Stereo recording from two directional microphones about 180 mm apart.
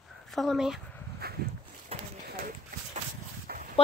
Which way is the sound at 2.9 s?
50° right (ahead or behind).